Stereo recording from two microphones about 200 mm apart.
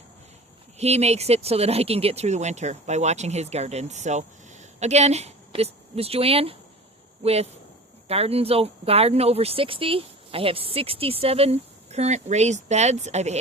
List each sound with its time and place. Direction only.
0.8 s a woman's voice: 30° right (ahead or behind)